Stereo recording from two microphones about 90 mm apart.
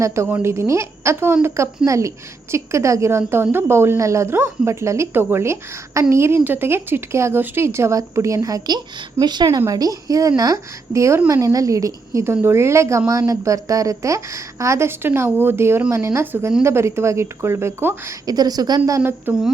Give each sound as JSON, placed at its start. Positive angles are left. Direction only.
{"t": 0.0, "sound": "a woman's voice", "side_deg": -25}
{"t": 18.3, "sound": "speech", "side_deg": -45}
{"t": 18.9, "sound": "speech", "side_deg": -30}